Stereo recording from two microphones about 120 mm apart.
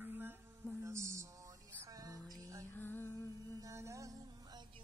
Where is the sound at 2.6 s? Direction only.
15° left (ahead or behind).